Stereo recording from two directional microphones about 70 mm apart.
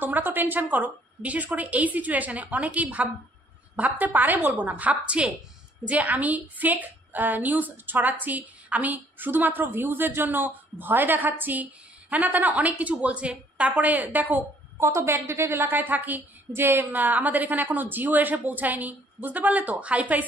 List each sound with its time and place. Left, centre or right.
0.0 s a woman's voice: right
14.8 s a woman's voice: right; by 20.2 s centre